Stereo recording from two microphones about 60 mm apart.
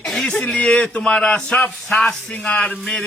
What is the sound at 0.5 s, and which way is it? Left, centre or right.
A man's voice, centre.